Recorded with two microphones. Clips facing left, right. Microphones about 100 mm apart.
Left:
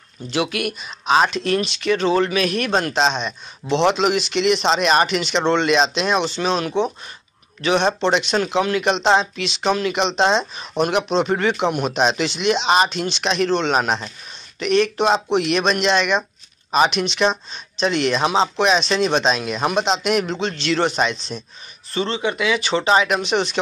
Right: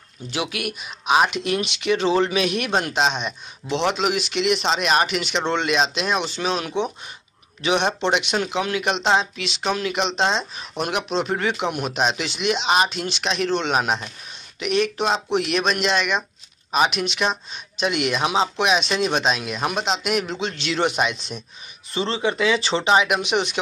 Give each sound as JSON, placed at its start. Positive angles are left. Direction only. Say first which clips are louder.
{"t": 0.3, "sound": "speech", "louder": "left 5 dB", "side_deg": -5}
{"t": 22.0, "sound": "speech", "louder": "even", "side_deg": -30}